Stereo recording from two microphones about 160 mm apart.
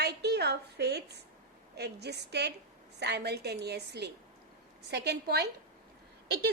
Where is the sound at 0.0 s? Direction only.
90° right.